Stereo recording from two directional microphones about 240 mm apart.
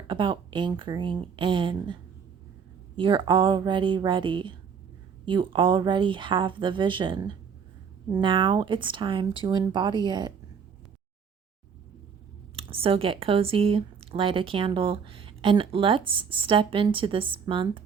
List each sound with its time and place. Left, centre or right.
0.1 s speech: centre
12.5 s speech: right